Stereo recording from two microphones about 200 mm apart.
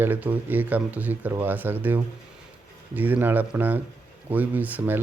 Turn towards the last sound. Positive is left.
turn(degrees=-10)  # may be behind; listen again after turning